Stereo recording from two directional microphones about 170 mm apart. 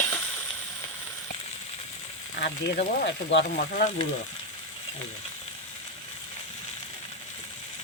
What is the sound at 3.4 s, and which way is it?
Speech, 50° left (ahead or behind).